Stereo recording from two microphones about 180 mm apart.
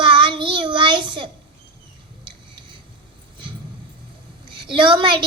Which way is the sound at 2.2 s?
25° right (ahead or behind).